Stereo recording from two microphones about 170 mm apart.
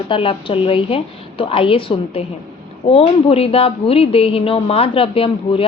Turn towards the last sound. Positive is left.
turn(degrees=35)  # may be behind; listen again after turning